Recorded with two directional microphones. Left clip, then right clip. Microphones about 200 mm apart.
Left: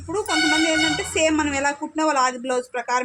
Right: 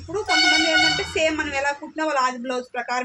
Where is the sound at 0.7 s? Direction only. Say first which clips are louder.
Right 2 dB; 50° left (ahead or behind).